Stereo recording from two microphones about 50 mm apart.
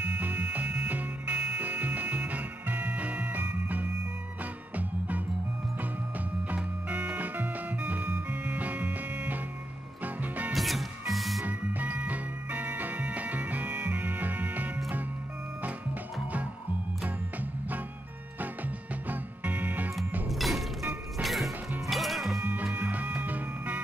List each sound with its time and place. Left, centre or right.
0.0 s music: right
10.5 s music: centre
11.4 s music: right
20.2 s music: centre
22.4 s music: right